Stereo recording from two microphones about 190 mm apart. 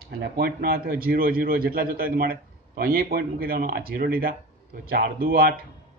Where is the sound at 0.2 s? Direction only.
50° right (ahead or behind).